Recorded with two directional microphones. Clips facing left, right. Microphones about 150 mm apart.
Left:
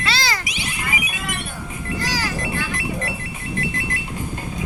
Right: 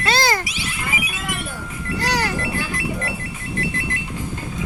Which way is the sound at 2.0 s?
65° right (ahead or behind).